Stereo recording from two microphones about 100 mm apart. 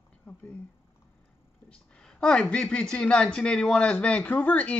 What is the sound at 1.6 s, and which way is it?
Speech, 5° left (ahead or behind).